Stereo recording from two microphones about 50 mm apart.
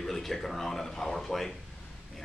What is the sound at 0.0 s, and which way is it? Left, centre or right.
Speech, centre.